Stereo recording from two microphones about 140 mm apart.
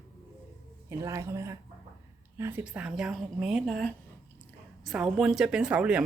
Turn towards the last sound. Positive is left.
turn(degrees=-5)  # may be behind; listen again after turning